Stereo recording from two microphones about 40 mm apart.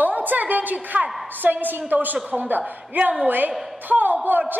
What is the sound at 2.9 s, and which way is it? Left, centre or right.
A woman's voice, right.